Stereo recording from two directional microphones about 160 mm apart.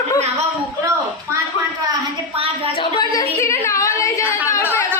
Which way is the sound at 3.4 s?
20° left (ahead or behind).